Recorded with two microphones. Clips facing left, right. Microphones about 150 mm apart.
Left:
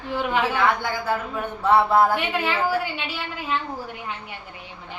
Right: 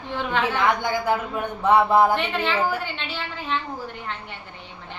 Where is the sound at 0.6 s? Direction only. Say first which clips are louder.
Right 1 dB; 15° right (ahead or behind).